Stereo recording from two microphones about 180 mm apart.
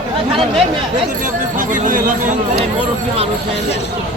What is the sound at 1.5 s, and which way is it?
Speech, 45° right (ahead or behind).